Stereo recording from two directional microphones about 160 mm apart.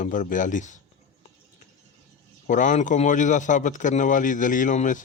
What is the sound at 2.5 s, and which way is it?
Speech, 50° left (ahead or behind).